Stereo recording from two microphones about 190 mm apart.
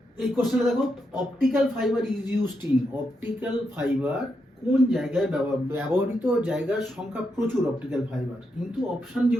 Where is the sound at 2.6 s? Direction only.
10° right (ahead or behind).